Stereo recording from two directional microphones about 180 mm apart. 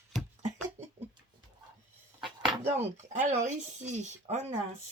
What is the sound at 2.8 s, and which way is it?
Speech, 40° right (ahead or behind).